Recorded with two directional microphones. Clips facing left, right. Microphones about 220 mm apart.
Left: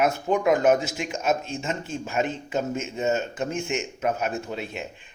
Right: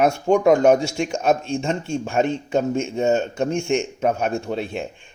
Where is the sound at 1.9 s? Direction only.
5° left (ahead or behind).